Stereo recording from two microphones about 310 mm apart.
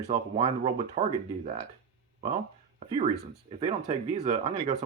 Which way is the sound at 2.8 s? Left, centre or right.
Centre.